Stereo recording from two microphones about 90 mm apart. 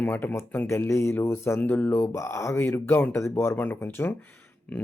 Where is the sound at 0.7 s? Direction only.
30° left (ahead or behind).